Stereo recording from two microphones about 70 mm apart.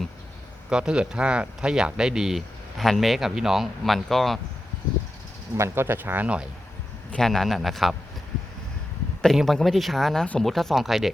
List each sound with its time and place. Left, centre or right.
0.7 s speech: centre
5.5 s speech: right; by 6.5 s centre
7.2 s speech: centre
9.2 s speech: centre